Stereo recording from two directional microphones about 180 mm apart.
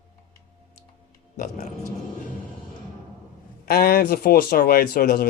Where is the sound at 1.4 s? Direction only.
40° left (ahead or behind).